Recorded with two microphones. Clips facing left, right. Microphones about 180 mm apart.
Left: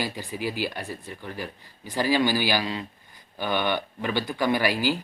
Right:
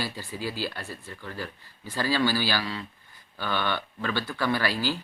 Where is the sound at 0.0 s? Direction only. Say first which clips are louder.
Left 3 dB; 15° left (ahead or behind).